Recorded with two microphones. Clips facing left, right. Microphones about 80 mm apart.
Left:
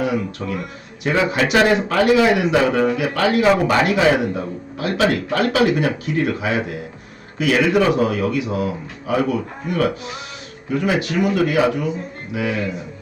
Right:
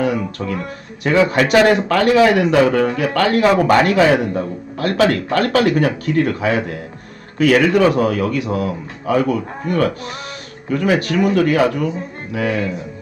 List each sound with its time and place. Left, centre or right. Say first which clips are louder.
0.0 s a man's voice: right 2 dB; right